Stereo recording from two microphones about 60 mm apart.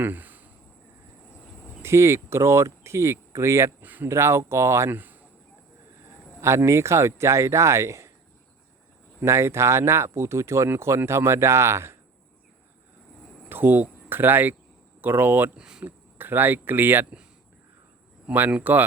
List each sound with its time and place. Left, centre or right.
0.0 s a sound: right
1.8 s speech: right
3.8 s speech: right
4.1 s speech: right
4.9 s speech: right
6.4 s speech: right
9.2 s speech: right
13.5 s speech: right
15.5 s speech: centre
15.8 s speech: right
18.3 s speech: right